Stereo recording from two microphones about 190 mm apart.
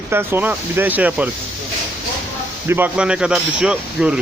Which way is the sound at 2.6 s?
10° right (ahead or behind).